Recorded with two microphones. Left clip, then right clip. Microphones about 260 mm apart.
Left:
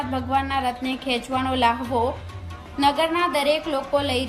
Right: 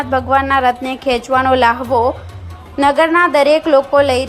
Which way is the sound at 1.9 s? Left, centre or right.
Right.